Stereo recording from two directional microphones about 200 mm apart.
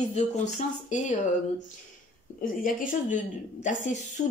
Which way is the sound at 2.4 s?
40° left (ahead or behind).